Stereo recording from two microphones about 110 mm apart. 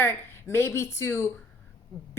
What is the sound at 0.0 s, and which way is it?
A woman's voice, 25° left (ahead or behind).